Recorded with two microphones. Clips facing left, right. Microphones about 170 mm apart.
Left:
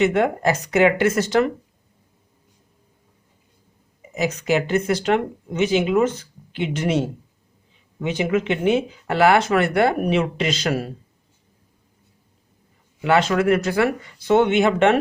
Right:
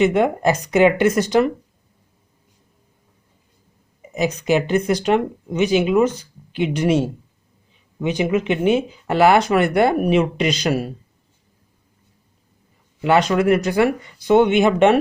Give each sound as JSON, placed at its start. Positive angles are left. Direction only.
{"t": 0.0, "sound": "speech", "side_deg": -15}
{"t": 4.2, "sound": "speech", "side_deg": -20}
{"t": 13.1, "sound": "speech", "side_deg": -15}